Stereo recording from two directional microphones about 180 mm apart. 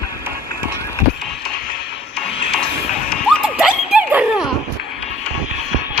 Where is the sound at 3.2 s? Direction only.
Centre (ahead or behind).